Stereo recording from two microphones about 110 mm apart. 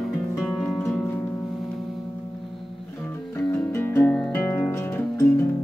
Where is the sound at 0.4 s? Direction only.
5° left (ahead or behind).